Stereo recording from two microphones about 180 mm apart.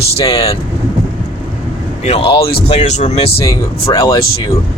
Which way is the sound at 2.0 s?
30° left (ahead or behind).